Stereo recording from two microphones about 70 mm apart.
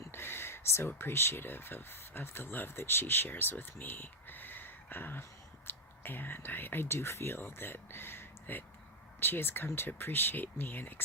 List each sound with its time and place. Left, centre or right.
0.1 s speech: left